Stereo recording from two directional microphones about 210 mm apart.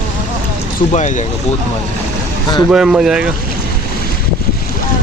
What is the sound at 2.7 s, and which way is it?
Speech, 5° right (ahead or behind).